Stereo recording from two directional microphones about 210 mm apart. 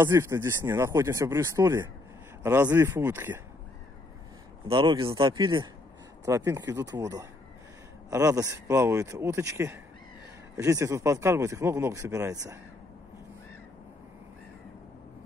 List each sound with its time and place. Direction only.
0.0 s speech: 10° right (ahead or behind)
4.6 s speech: 25° right (ahead or behind)